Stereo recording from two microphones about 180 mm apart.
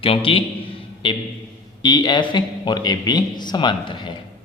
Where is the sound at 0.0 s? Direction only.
30° left (ahead or behind).